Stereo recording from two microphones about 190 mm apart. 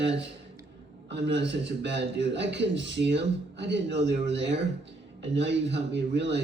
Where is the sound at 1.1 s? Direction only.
65° right (ahead or behind).